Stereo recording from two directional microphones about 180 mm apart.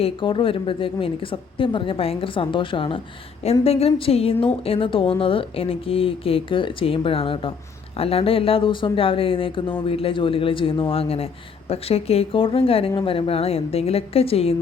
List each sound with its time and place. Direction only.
0.0 s a woman's voice: 30° left (ahead or behind)